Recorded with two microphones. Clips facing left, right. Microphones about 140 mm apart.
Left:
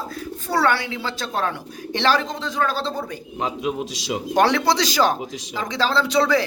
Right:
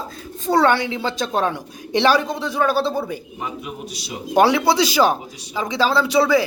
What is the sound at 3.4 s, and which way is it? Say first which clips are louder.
Speech: left 5 dB; 90° left.